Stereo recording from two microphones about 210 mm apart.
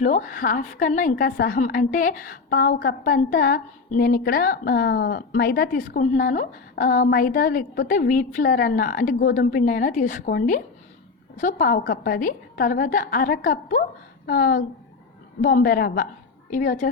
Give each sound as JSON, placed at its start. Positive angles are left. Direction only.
{"t": 0.0, "sound": "a woman's voice", "side_deg": 35}